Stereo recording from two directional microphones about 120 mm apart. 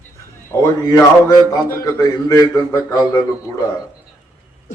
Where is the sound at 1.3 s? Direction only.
25° left (ahead or behind).